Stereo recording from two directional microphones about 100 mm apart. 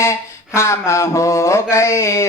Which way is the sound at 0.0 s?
30° left (ahead or behind).